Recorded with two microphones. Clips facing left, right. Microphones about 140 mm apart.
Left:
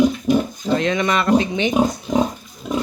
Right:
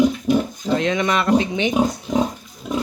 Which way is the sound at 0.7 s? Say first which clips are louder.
Left 1 dB; 15° right (ahead or behind).